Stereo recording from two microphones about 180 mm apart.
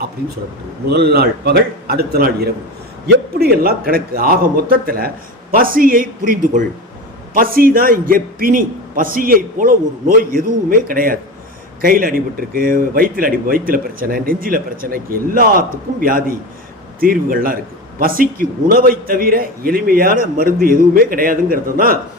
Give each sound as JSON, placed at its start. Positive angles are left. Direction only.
{"t": 0.2, "sound": "a man's voice", "side_deg": -60}